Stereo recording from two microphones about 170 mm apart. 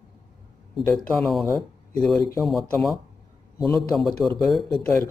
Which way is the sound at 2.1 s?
15° left (ahead or behind).